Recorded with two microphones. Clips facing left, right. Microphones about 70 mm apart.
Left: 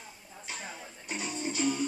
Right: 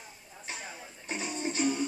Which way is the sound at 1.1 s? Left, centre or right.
Right.